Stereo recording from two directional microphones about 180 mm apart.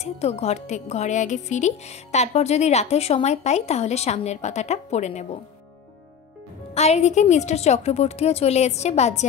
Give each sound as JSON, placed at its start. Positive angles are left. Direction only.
{"t": 0.0, "sound": "speech", "side_deg": 35}
{"t": 6.7, "sound": "speech", "side_deg": 35}